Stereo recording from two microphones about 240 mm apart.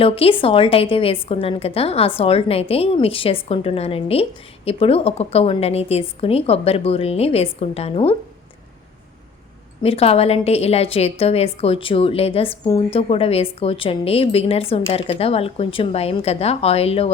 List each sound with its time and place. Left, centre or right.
0.0 s a woman's voice: left
9.8 s a woman's voice: left